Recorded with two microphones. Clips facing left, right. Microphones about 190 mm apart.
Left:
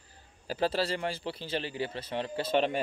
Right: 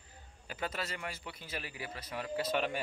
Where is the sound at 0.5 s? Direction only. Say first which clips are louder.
Left 10 dB; 30° left (ahead or behind).